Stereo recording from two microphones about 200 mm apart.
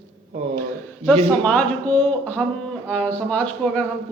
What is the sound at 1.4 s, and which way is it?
Speech, 5° left (ahead or behind).